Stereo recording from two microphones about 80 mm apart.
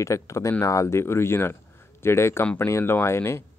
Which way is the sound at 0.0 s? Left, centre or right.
Left.